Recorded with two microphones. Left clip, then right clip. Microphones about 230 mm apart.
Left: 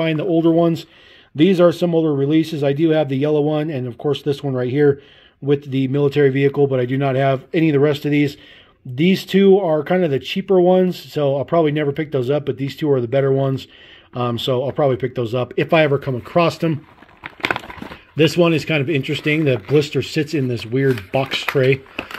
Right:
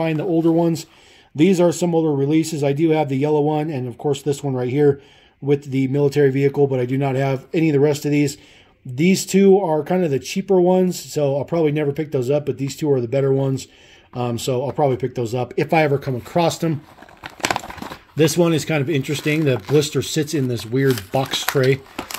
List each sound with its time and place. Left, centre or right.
0.0 s speech: centre
4.1 s speech: right
4.5 s speech: centre
17.2 s a sound: centre
18.1 s speech: centre